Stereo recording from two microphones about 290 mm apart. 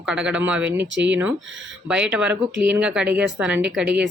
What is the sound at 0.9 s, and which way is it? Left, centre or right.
Speech, right.